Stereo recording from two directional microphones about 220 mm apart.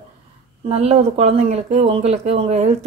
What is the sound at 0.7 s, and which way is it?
Speech, 30° right (ahead or behind).